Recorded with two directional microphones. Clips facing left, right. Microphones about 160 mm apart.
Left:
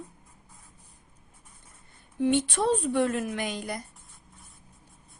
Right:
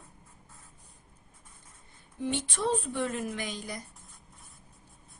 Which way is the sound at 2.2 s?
65° left (ahead or behind).